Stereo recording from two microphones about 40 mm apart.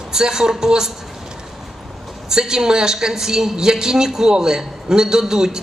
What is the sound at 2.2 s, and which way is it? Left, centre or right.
Speech, centre.